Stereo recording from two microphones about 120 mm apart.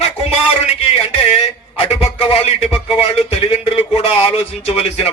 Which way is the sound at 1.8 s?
65° left (ahead or behind).